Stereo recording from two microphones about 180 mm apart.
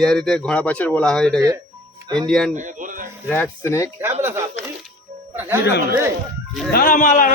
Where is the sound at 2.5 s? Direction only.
45° right (ahead or behind).